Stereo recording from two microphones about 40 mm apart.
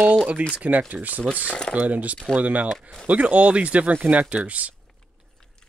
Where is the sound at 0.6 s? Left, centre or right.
Right.